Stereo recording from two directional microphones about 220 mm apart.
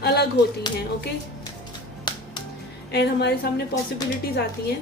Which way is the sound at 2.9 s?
45° left (ahead or behind).